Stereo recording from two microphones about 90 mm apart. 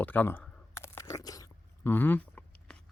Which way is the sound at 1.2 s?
40° left (ahead or behind).